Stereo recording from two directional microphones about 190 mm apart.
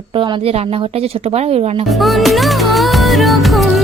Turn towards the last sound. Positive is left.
turn(degrees=0)  # may be behind; listen again after turning